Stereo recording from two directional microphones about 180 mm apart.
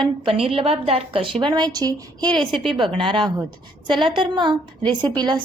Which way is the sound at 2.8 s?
30° right (ahead or behind).